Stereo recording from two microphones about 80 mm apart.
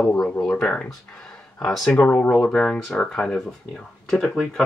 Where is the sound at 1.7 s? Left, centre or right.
Centre.